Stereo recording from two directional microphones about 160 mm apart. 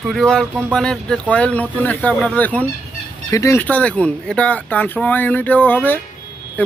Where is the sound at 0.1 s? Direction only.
Centre (ahead or behind).